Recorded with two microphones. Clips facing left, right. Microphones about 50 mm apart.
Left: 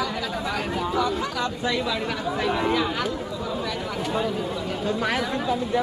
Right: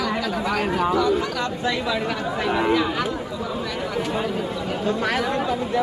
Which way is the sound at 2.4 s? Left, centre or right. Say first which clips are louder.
Right 3 dB; centre.